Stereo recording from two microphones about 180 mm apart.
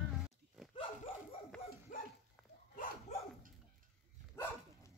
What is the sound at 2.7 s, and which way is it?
Dog, 45° left (ahead or behind).